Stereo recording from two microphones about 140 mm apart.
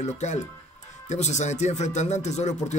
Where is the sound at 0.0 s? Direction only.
55° left (ahead or behind).